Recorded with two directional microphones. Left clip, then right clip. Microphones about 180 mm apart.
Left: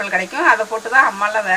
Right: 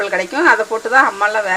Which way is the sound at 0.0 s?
55° right (ahead or behind).